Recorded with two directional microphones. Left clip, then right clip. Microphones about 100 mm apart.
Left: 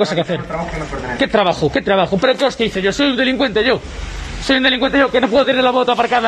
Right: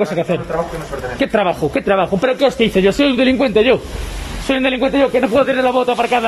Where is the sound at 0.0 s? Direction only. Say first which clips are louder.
Even; 20° right (ahead or behind).